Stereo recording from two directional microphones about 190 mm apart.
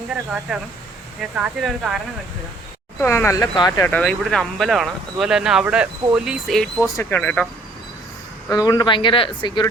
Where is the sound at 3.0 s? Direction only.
15° left (ahead or behind).